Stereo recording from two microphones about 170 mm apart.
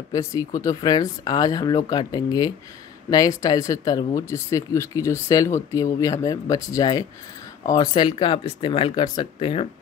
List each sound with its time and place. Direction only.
0.1 s speech: 20° left (ahead or behind)